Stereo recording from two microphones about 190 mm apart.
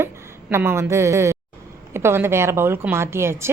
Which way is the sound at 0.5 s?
15° right (ahead or behind).